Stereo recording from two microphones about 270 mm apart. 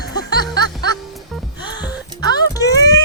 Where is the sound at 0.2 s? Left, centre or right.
Centre.